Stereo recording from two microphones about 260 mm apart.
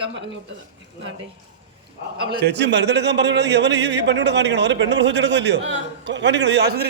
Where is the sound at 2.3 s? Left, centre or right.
Right.